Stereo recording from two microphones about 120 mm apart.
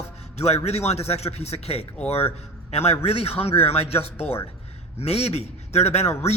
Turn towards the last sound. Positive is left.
turn(degrees=65)  # may be behind; listen again after turning